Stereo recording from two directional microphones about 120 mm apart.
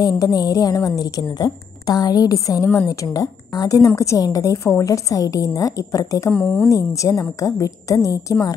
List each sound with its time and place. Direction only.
0.0 s a woman's voice: 30° left (ahead or behind)
6.3 s a woman's voice: 5° left (ahead or behind)
6.6 s a woman's voice: 25° left (ahead or behind)